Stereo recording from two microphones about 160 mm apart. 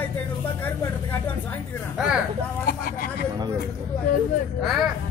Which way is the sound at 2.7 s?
70° left (ahead or behind).